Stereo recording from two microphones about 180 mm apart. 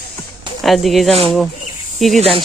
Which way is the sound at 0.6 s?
Centre (ahead or behind).